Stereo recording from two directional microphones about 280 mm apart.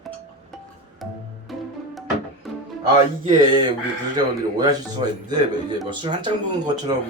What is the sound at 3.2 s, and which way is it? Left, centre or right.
Speech, centre.